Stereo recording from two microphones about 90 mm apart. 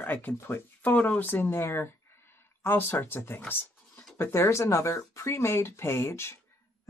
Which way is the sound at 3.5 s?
25° left (ahead or behind).